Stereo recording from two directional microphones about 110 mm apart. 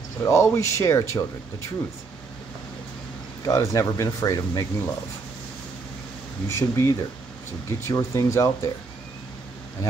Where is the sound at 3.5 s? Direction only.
30° left (ahead or behind).